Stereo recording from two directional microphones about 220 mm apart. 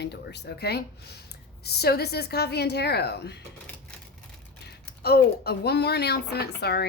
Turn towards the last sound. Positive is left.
turn(degrees=45)  # may be behind; listen again after turning